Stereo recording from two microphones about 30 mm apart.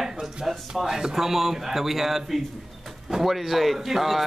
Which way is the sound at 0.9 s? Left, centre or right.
Right.